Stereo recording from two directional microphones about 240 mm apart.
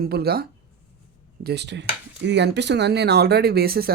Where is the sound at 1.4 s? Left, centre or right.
Right.